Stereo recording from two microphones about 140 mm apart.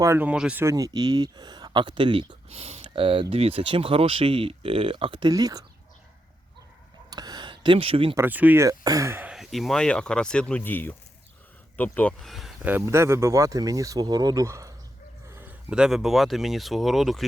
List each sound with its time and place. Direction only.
0.0 s speech: 15° right (ahead or behind)
0.6 s speech: 25° right (ahead or behind)
7.1 s a sound: 30° right (ahead or behind)
8.1 s speech: 15° right (ahead or behind)
8.6 s speech: 25° right (ahead or behind)
9.3 s speech: centre (ahead or behind)
12.2 s speech: centre (ahead or behind)
12.6 s speech: 15° right (ahead or behind)